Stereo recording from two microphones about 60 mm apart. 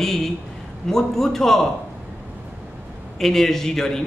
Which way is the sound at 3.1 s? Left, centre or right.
Centre.